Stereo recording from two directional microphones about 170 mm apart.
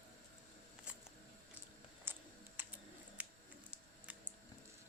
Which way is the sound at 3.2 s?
10° right (ahead or behind).